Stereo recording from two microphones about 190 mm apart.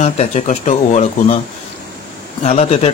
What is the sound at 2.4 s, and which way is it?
Speech, 35° left (ahead or behind).